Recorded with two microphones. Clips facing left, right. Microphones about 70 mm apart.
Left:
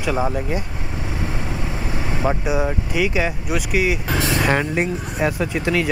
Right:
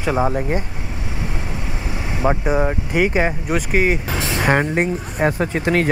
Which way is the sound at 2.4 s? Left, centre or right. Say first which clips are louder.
Right 2 dB; right.